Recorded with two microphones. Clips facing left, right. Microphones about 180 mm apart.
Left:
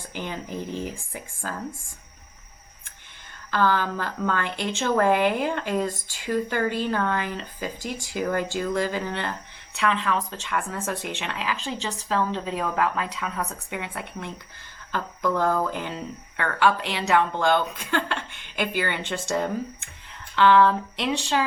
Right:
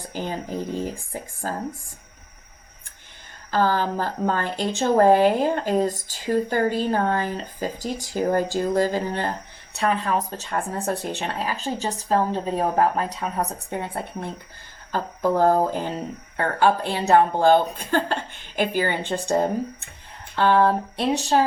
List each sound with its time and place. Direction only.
0.0 s speech: 40° right (ahead or behind)
3.5 s speech: 40° right (ahead or behind)